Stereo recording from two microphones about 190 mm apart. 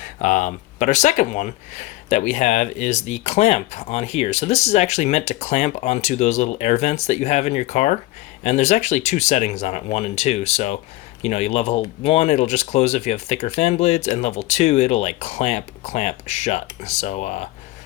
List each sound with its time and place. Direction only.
0.0 s speech: 40° left (ahead or behind)